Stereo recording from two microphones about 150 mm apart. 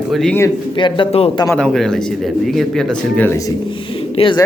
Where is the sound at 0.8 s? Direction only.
30° left (ahead or behind).